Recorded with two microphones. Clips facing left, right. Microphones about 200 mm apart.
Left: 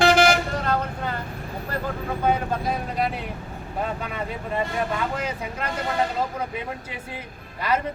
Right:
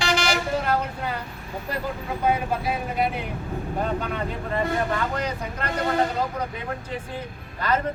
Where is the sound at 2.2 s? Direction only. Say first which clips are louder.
Even; 10° right (ahead or behind).